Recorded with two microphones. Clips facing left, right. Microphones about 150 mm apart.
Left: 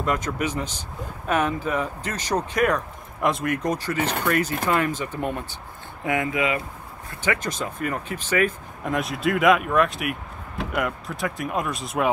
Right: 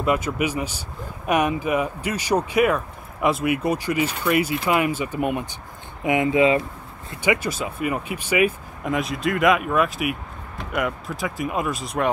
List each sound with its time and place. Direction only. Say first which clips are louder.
0.0 s speech: right 3 dB; 10° right (ahead or behind); by 6.6 s 30° right (ahead or behind)
7.1 s speech: right 4 dB; 10° right (ahead or behind)
8.8 s speech: right 1 dB; centre (ahead or behind)